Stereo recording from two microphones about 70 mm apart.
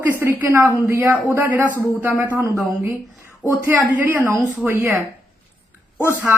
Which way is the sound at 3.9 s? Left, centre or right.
Right.